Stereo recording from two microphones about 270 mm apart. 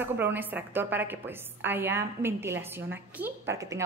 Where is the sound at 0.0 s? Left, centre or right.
Centre.